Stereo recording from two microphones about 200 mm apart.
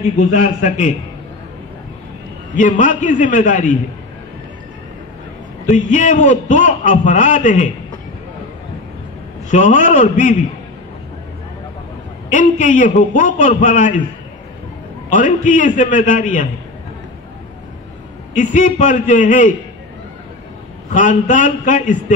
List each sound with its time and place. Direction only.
0.3 s a man's voice: 40° left (ahead or behind)
2.5 s a man's voice: 40° left (ahead or behind)
5.7 s a man's voice: 40° left (ahead or behind)
9.5 s a man's voice: 40° left (ahead or behind)
12.3 s a man's voice: 40° left (ahead or behind)
15.0 s a man's voice: 40° left (ahead or behind)
18.3 s a man's voice: 40° left (ahead or behind)
20.9 s a man's voice: 40° left (ahead or behind)